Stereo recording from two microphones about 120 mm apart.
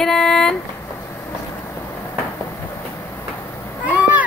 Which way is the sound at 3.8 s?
15° right (ahead or behind).